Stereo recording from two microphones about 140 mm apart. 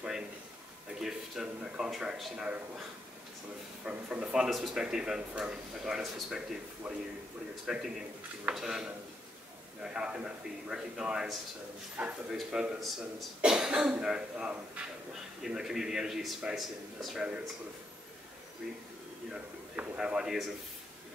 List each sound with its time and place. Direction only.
0.9 s speech: 5° right (ahead or behind)
3.8 s speech: 5° right (ahead or behind)
9.9 s speech: 5° right (ahead or behind)
19.3 s a man's voice: 10° right (ahead or behind)